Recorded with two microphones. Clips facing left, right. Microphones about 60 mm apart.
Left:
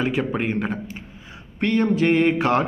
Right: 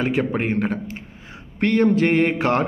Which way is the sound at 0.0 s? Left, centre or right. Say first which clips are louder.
Right 1 dB; right.